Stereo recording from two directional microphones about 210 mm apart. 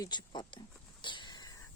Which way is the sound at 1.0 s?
20° left (ahead or behind).